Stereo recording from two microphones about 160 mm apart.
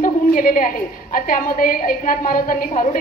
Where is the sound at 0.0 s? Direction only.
60° left (ahead or behind).